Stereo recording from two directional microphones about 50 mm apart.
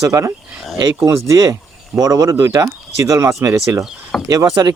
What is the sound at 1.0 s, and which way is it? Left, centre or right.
Speech, right.